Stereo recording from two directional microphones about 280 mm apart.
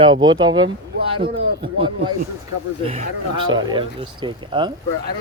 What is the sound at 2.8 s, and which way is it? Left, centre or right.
Speech, right.